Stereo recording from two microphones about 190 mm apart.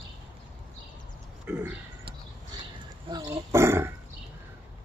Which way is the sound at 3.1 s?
20° right (ahead or behind).